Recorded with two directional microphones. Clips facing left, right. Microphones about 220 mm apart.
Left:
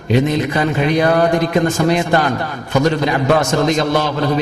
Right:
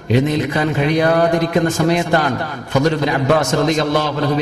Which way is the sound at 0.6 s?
40° right (ahead or behind).